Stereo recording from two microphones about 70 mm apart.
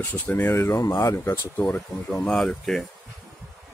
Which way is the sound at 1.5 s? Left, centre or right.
Left.